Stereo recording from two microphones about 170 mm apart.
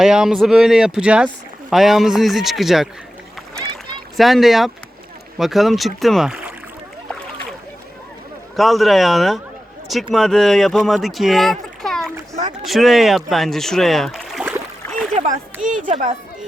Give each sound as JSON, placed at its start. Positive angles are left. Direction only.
{"t": 0.0, "sound": "speech", "side_deg": -5}
{"t": 4.2, "sound": "speech", "side_deg": 0}
{"t": 8.5, "sound": "speech", "side_deg": 0}
{"t": 15.1, "sound": "a sound", "side_deg": -45}